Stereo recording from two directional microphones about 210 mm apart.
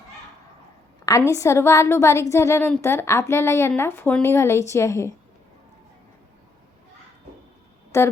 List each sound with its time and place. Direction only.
1.3 s a woman's voice: 15° left (ahead or behind)
7.9 s speech: 15° left (ahead or behind)